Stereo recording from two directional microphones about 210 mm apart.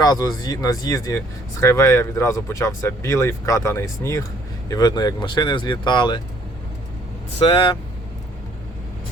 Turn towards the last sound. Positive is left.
turn(degrees=25)  # may be behind; listen again after turning